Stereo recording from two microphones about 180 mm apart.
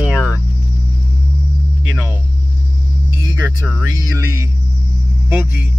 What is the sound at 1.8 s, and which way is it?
Speech, 10° right (ahead or behind).